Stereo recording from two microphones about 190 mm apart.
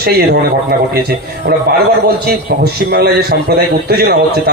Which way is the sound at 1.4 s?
50° right (ahead or behind).